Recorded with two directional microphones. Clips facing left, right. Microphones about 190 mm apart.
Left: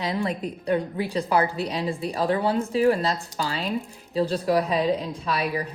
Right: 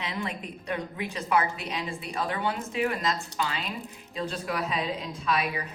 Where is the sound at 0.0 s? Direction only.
35° left (ahead or behind).